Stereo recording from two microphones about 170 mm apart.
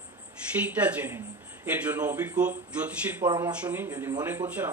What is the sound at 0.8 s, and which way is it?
A man's voice, 10° right (ahead or behind).